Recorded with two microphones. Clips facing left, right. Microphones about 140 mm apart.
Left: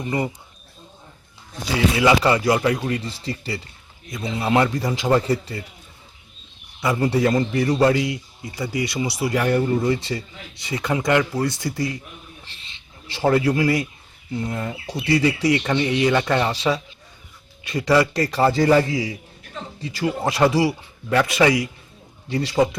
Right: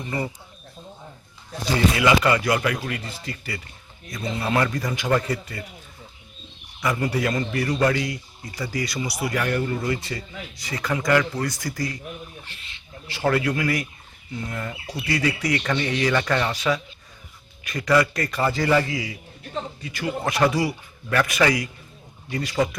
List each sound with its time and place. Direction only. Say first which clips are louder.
2.0 s a man's voice: left 5 dB; 25° left (ahead or behind)
6.7 s a man's voice: left 4 dB; 25° left (ahead or behind)
13.1 s a man's voice: left 4 dB; 30° left (ahead or behind)
15.0 s a man's voice: left 6 dB; 25° left (ahead or behind)